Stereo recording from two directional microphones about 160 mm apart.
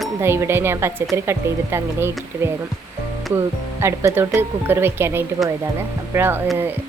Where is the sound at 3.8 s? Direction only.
15° right (ahead or behind).